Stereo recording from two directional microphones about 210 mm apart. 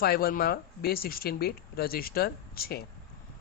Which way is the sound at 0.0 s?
45° left (ahead or behind).